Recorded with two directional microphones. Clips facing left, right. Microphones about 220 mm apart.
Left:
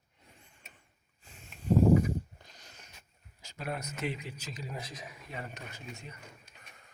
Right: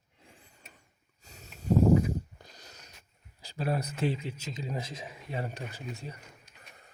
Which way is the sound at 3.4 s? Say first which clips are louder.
Right 6 dB; 35° right (ahead or behind).